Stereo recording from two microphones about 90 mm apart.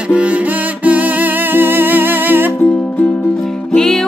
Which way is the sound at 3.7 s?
5° left (ahead or behind).